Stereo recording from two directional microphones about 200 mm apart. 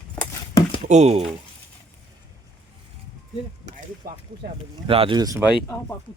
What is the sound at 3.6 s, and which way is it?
Speech, 40° right (ahead or behind).